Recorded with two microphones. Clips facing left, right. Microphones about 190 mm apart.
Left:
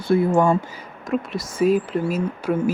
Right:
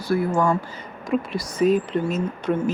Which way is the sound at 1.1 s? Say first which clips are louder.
Even; centre (ahead or behind).